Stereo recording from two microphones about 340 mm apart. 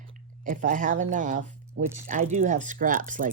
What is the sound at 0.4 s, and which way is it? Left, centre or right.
Speech, right.